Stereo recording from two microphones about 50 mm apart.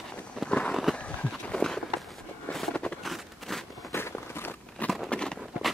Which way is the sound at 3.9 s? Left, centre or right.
Left.